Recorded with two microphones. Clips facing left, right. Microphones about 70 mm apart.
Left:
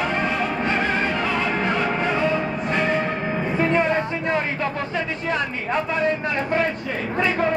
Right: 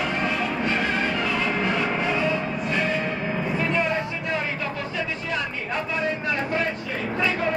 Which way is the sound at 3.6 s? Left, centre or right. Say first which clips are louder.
Left 6 dB; left.